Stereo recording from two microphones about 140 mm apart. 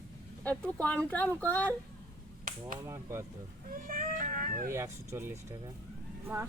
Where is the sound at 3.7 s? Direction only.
75° right (ahead or behind).